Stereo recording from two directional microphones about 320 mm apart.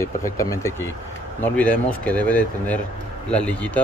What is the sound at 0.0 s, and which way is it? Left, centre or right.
Speech, centre.